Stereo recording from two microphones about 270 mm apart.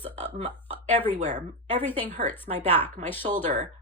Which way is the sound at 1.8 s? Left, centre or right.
Centre.